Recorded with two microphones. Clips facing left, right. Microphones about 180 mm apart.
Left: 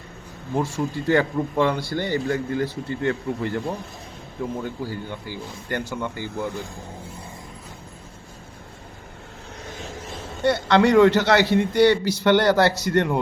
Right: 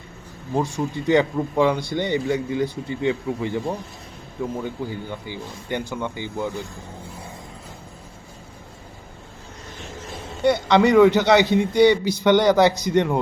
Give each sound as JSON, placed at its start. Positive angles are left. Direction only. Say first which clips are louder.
{"t": 0.5, "sound": "speech", "louder": "right 1 dB", "side_deg": -15}
{"t": 4.6, "sound": "speech", "louder": "right 1 dB", "side_deg": -15}
{"t": 10.4, "sound": "speech", "louder": "right 1 dB", "side_deg": -15}